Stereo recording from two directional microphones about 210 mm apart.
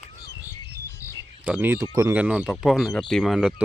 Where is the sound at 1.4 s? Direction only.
10° right (ahead or behind).